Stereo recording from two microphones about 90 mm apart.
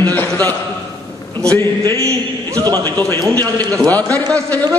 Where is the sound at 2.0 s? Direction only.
35° right (ahead or behind).